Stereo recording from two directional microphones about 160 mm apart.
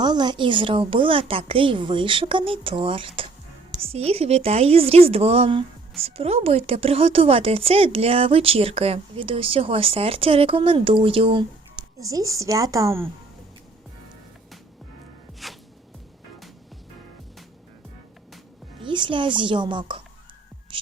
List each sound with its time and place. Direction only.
0.0 s speech: 25° right (ahead or behind)
15.4 s music: centre (ahead or behind)
18.8 s speech: 30° right (ahead or behind)